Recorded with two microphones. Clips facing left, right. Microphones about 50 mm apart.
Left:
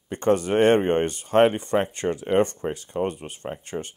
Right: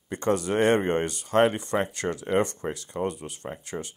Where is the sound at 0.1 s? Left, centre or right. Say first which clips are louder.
Left 4 dB; left.